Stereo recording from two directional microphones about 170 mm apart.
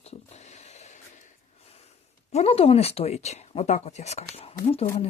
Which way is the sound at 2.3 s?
35° left (ahead or behind).